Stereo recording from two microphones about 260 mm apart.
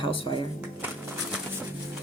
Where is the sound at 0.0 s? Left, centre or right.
Centre.